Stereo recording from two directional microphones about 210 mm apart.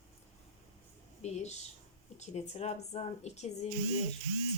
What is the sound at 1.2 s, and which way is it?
Speech, 35° left (ahead or behind).